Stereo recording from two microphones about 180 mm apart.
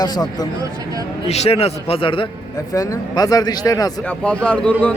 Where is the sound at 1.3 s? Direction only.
35° left (ahead or behind).